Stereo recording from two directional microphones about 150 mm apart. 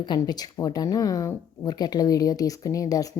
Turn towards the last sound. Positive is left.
turn(degrees=25)  # may be behind; listen again after turning